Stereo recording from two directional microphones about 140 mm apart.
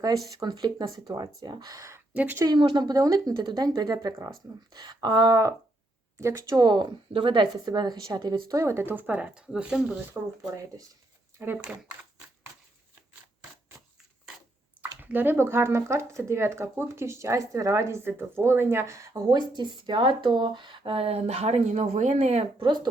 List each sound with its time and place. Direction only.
0.3 s speech: 30° right (ahead or behind)
2.1 s speech: 10° right (ahead or behind)
2.4 s speech: 35° right (ahead or behind); by 10.0 s 5° right (ahead or behind)
10.4 s speech: 25° right (ahead or behind)
11.3 s speech: 10° right (ahead or behind)
14.8 s speech: 15° right (ahead or behind); by 22.4 s 50° right (ahead or behind)
22.6 s speech: 30° right (ahead or behind)